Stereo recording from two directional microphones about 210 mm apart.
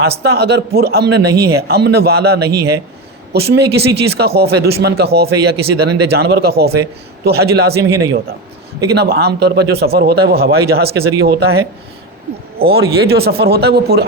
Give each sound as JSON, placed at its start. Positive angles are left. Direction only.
{"t": 0.2, "sound": "a man's voice", "side_deg": -50}
{"t": 8.9, "sound": "a man's voice", "side_deg": -50}